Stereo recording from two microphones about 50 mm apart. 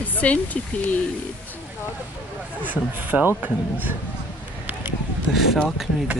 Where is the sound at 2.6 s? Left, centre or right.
Right.